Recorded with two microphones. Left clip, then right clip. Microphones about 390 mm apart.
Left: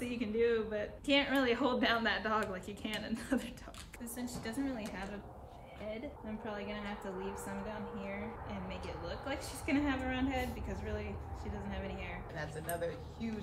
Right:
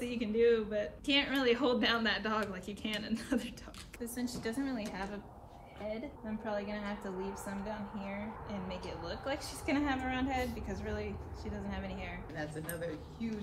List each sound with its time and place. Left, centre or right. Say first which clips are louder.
0.0 s a woman's voice: right 3 dB; centre
6.4 s a woman's voice: right 4 dB; centre
8.0 s a woman's voice: even; centre
12.4 s speech: left 2 dB; centre